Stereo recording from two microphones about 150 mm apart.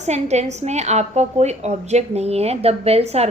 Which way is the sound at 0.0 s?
50° right (ahead or behind).